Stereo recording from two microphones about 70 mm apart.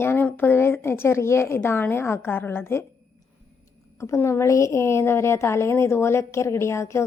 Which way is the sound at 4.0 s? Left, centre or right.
Left.